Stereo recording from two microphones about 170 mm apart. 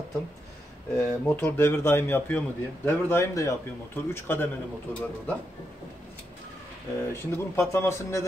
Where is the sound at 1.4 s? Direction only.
10° left (ahead or behind).